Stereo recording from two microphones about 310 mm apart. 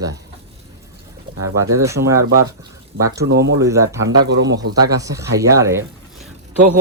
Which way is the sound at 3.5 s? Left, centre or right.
Centre.